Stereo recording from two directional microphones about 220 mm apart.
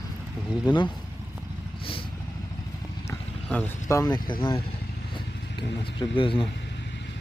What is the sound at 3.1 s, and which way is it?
Speech, 10° left (ahead or behind).